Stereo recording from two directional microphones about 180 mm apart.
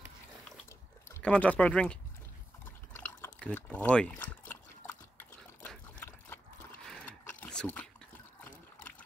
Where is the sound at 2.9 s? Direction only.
10° left (ahead or behind).